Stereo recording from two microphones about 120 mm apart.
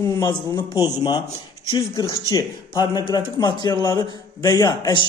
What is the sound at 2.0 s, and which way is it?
A man's voice, 30° left (ahead or behind).